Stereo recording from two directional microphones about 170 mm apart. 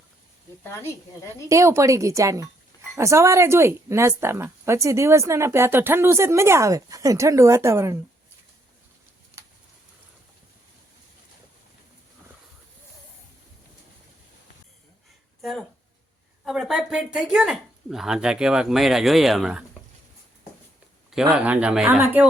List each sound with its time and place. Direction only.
0.6 s speech: 15° left (ahead or behind)
1.5 s a woman's voice: 15° right (ahead or behind)
15.4 s a sound: centre (ahead or behind)
16.4 s speech: centre (ahead or behind)
21.1 s a woman's voice: 5° right (ahead or behind)